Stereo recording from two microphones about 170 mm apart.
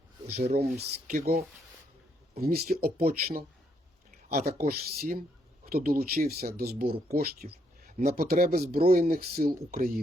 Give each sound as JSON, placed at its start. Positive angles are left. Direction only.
{"t": 0.3, "sound": "speech", "side_deg": -35}
{"t": 0.8, "sound": "speech", "side_deg": -60}